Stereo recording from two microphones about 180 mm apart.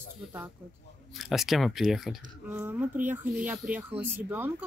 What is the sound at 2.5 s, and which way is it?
Speech, 15° right (ahead or behind).